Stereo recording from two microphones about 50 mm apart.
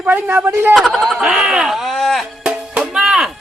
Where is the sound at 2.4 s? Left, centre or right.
Centre.